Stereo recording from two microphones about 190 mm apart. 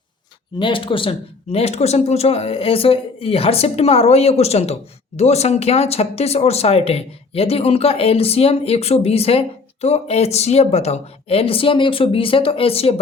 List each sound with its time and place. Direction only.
0.6 s speech: 25° left (ahead or behind)